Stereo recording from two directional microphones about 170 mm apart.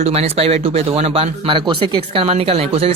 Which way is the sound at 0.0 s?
35° right (ahead or behind).